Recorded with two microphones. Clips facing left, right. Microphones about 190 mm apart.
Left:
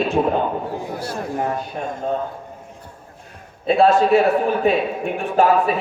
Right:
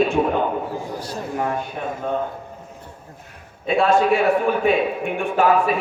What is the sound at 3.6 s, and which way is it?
A man's voice, 35° left (ahead or behind).